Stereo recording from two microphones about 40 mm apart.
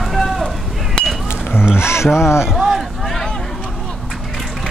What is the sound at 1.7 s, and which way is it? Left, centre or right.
Speech, left.